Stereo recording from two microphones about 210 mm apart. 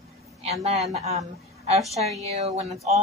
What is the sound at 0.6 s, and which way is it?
Speech, 30° right (ahead or behind).